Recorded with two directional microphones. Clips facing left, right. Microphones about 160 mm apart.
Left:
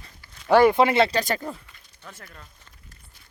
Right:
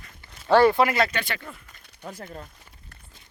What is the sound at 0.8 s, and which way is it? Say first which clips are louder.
Speech: left 4 dB; 25° left (ahead or behind).